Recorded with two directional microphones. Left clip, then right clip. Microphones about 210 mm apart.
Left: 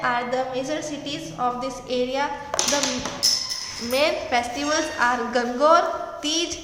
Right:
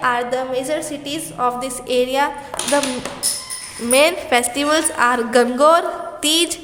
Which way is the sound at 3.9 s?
50° right (ahead or behind).